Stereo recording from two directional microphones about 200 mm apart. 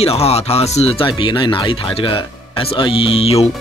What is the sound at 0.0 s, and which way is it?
Speech, 30° left (ahead or behind).